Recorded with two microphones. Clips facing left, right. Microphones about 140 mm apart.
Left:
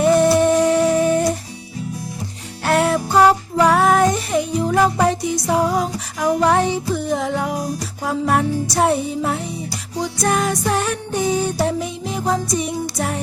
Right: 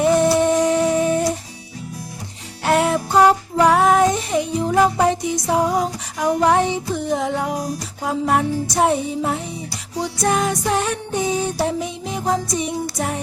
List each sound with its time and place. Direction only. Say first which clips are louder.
0.0 s music: left 2 dB; 20° right (ahead or behind)
2.6 s music: even; 15° right (ahead or behind)